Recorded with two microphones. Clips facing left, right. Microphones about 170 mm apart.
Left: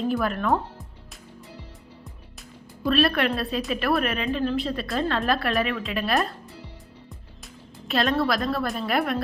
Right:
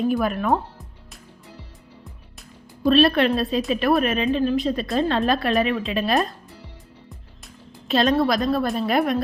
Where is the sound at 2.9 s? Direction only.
25° right (ahead or behind).